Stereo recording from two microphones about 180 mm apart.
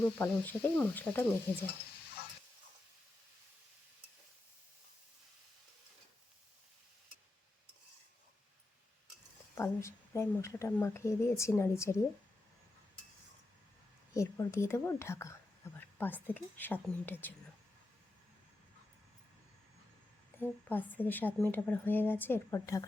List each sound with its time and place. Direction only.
0.2 s speech: 10° left (ahead or behind)
9.6 s speech: 15° left (ahead or behind)
14.1 s speech: 15° left (ahead or behind)
20.3 s a sound: 10° left (ahead or behind)
20.7 s speech: 10° left (ahead or behind)